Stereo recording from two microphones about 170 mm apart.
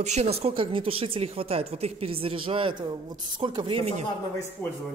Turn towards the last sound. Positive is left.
turn(degrees=-35)  # may be behind; listen again after turning